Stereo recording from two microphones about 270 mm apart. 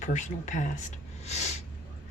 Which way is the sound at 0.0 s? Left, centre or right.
Left.